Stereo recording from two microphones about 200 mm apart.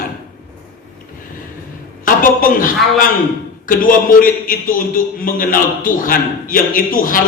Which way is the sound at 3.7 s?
45° left (ahead or behind).